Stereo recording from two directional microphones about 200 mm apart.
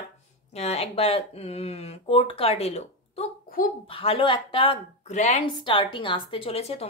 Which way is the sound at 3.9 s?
30° left (ahead or behind).